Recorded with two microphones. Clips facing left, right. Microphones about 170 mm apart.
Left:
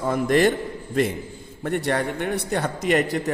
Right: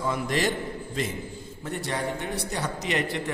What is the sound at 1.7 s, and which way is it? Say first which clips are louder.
A man's voice: left 6 dB; 65° left (ahead or behind).